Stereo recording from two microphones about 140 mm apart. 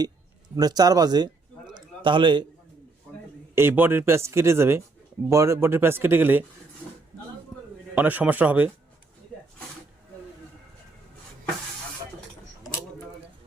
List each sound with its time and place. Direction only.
0.5 s a man's voice: 30° right (ahead or behind)
3.5 s speech: 15° right (ahead or behind)
7.9 s speech: 10° right (ahead or behind)